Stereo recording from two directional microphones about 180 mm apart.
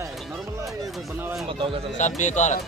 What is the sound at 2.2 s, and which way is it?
Speech, 40° left (ahead or behind).